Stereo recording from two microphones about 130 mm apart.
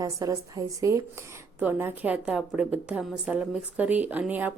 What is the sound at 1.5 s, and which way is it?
A woman's voice, 15° right (ahead or behind).